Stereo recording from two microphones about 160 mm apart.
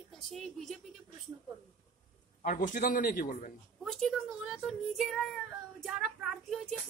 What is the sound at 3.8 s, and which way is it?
A woman's voice, centre (ahead or behind).